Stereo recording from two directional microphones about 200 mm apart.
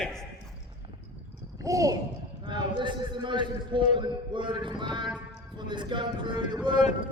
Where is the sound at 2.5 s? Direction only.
25° right (ahead or behind).